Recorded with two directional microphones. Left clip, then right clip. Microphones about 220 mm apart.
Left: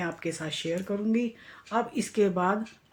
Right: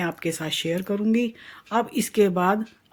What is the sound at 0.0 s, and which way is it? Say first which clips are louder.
Speech: right 5 dB; 50° right (ahead or behind).